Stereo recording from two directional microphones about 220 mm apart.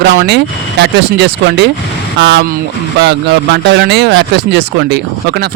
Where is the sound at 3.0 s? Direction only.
50° right (ahead or behind).